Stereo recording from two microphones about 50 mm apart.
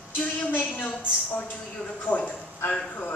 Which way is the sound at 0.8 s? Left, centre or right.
Left.